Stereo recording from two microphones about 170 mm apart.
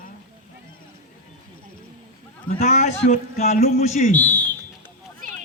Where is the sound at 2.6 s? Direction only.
45° left (ahead or behind).